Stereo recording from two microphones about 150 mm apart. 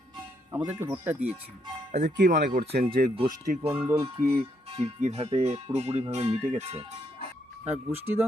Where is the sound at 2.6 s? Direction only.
75° right (ahead or behind).